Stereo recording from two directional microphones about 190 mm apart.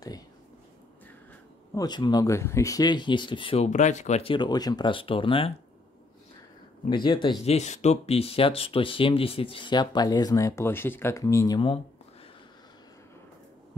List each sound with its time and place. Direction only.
1.8 s speech: 20° left (ahead or behind)
6.9 s speech: 25° left (ahead or behind)
7.4 s speech: 35° left (ahead or behind)